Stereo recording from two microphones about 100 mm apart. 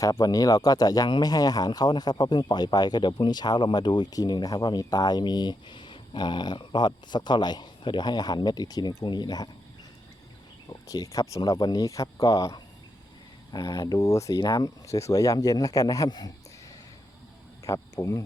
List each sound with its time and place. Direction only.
0.0 s speech: 40° left (ahead or behind)
10.7 s speech: 35° left (ahead or behind)
17.7 s speech: 35° left (ahead or behind)